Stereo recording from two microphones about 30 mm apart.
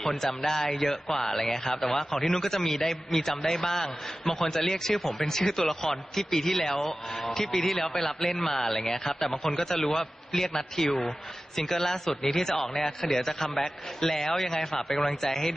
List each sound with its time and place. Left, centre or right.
0.2 s a man's voice: centre
14.3 s a man's voice: centre